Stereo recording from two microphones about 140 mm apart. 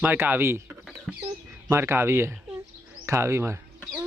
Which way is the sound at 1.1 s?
Centre (ahead or behind).